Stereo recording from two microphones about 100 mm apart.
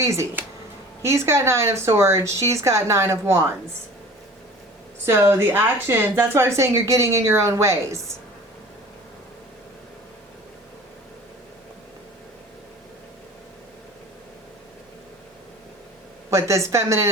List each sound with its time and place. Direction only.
0.0 s a woman's voice: 30° right (ahead or behind)
5.0 s a woman's voice: 25° right (ahead or behind)
16.3 s a woman's voice: 30° right (ahead or behind)